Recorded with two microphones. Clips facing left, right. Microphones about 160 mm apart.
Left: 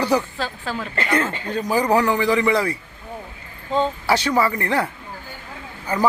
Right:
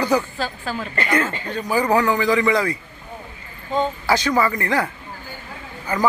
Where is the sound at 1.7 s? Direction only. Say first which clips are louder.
Even; 10° left (ahead or behind).